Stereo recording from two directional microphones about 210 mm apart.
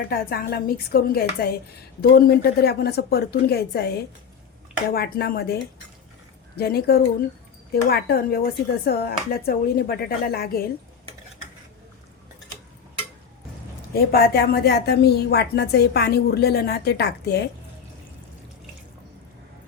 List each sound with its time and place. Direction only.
0.1 s a woman's voice: 45° left (ahead or behind)
6.6 s a woman's voice: 50° left (ahead or behind)
13.9 s a woman's voice: 45° left (ahead or behind)